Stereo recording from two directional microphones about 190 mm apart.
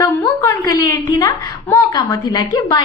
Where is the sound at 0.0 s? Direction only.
20° left (ahead or behind).